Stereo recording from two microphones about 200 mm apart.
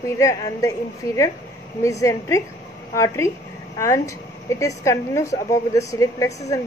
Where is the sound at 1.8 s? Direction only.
15° left (ahead or behind).